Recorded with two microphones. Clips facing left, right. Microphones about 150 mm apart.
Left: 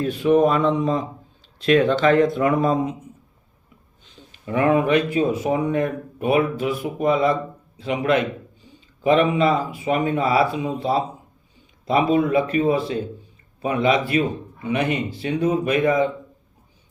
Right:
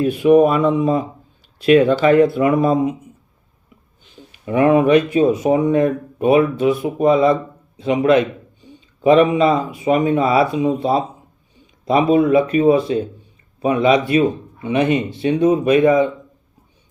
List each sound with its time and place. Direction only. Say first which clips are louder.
0.0 s speech: right 5 dB; 10° right (ahead or behind)
4.3 s speech: right 5 dB; 20° right (ahead or behind)
7.8 s a sound: right 6 dB; 20° right (ahead or behind)
9.0 s speech: right 5 dB; 20° right (ahead or behind)